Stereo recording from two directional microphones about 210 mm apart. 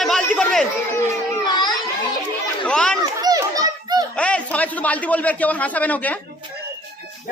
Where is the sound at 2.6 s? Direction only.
5° left (ahead or behind).